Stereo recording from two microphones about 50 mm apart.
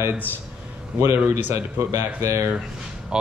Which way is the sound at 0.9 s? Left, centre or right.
Right.